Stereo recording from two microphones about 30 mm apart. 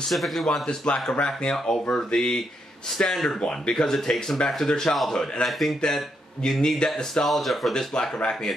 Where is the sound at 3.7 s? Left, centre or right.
Centre.